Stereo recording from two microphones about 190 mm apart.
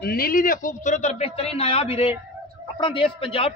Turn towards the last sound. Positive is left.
turn(degrees=30)  # may be behind; listen again after turning